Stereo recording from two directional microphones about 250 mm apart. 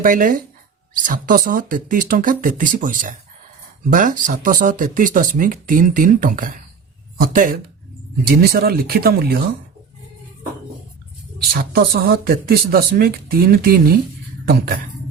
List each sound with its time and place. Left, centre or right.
0.0 s speech: right
11.5 s speech: right